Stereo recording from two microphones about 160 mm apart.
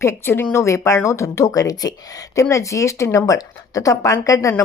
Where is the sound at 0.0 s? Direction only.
15° left (ahead or behind).